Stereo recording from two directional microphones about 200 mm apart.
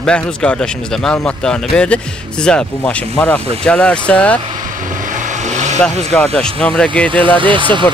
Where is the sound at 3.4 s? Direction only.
30° right (ahead or behind).